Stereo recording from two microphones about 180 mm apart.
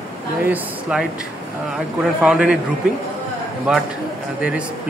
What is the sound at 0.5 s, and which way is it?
Speech, 5° right (ahead or behind).